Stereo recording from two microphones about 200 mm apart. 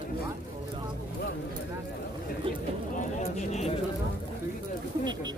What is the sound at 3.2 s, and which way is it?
Speech, 35° left (ahead or behind).